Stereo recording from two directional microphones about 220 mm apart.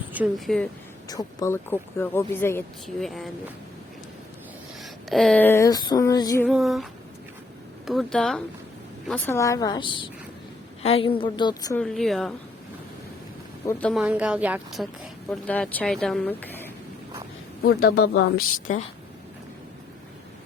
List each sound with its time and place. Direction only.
0.1 s speech: 5° right (ahead or behind)
1.0 s speech: 15° left (ahead or behind); by 3.3 s centre (ahead or behind)
4.8 s a sound: centre (ahead or behind); by 6.4 s 15° left (ahead or behind)
6.4 s speech: centre (ahead or behind)
7.9 s speech: centre (ahead or behind)
9.3 s a woman's voice: 15° left (ahead or behind)
11.8 s speech: centre (ahead or behind)
13.9 s speech: 5° right (ahead or behind)
17.6 s speech: 45° left (ahead or behind)